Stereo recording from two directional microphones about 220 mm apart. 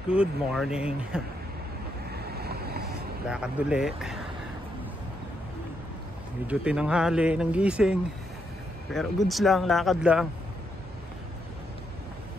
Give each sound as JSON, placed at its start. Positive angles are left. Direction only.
{"t": 0.1, "sound": "speech", "side_deg": -5}
{"t": 2.1, "sound": "waves", "side_deg": -45}
{"t": 3.3, "sound": "speech", "side_deg": -5}
{"t": 6.4, "sound": "speech", "side_deg": -5}